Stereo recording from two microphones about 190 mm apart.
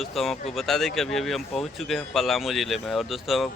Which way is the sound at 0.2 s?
Centre (ahead or behind).